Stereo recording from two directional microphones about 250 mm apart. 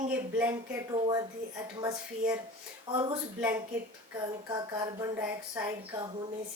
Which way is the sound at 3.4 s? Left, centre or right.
Centre.